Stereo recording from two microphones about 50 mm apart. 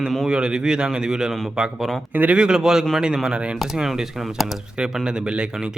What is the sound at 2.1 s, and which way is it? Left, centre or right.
Speech, right.